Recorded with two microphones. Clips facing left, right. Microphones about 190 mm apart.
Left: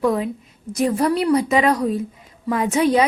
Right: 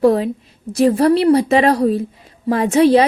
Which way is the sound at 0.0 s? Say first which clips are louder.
Right 6 dB; 30° right (ahead or behind).